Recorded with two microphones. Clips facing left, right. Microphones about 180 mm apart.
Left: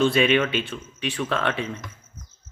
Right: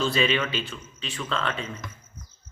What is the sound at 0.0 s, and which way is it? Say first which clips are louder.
Speech: left 5 dB; 55° left (ahead or behind).